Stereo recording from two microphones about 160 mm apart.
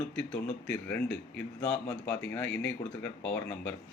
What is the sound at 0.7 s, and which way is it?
A man's voice, 10° left (ahead or behind).